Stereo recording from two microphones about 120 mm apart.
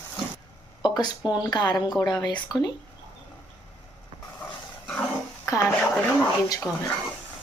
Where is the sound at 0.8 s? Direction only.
35° left (ahead or behind).